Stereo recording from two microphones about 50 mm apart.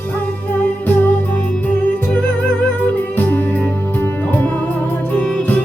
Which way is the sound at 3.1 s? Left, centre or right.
Left.